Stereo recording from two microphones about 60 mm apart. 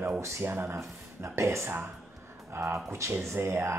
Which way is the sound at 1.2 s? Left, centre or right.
Right.